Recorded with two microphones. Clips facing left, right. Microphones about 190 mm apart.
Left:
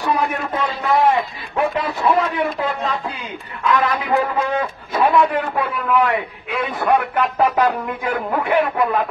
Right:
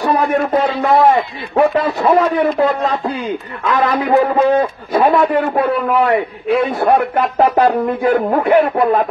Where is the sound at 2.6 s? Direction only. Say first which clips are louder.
Right 7 dB; 40° right (ahead or behind).